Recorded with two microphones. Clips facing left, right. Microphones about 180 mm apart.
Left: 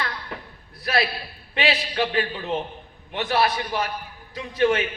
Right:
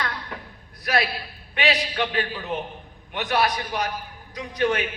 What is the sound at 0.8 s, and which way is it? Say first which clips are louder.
A man's voice: even; 30° left (ahead or behind).